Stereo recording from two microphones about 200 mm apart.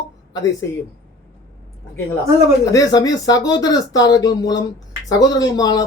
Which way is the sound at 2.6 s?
15° left (ahead or behind).